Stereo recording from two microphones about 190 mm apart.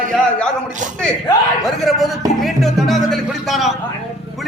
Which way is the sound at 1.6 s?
Centre (ahead or behind).